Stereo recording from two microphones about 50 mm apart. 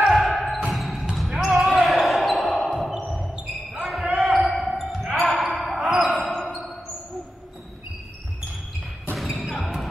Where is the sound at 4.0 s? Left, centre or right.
Right.